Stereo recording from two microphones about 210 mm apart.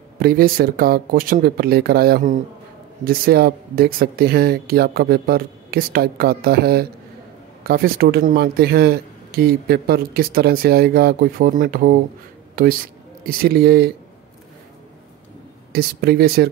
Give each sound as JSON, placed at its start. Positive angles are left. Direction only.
{"t": 0.2, "sound": "speech", "side_deg": -45}
{"t": 15.7, "sound": "speech", "side_deg": -45}